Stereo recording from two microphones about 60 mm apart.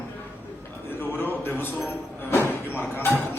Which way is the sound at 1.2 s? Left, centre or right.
Left.